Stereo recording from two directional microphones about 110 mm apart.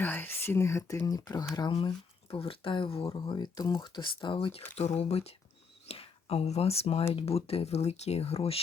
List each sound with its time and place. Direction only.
0.0 s speech: 20° left (ahead or behind); by 1.5 s 35° left (ahead or behind)
2.3 s speech: 55° left (ahead or behind)
3.2 s speech: 40° left (ahead or behind)
4.8 s speech: 80° left